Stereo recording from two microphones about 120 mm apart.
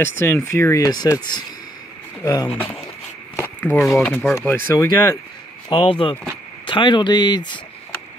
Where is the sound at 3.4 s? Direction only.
15° left (ahead or behind).